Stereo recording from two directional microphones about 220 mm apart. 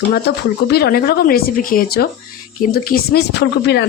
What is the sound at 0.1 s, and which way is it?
A woman's voice, 45° left (ahead or behind).